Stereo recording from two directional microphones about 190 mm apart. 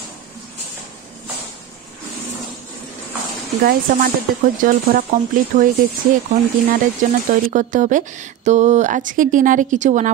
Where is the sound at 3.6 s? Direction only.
50° right (ahead or behind).